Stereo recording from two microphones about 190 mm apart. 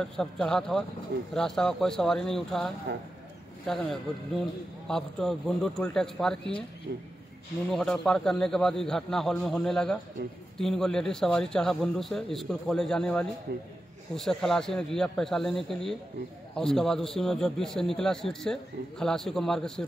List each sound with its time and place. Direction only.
0.0 s a man's voice: 5° left (ahead or behind)
6.9 s a man's voice: 55° right (ahead or behind)
7.7 s a man's voice: centre (ahead or behind)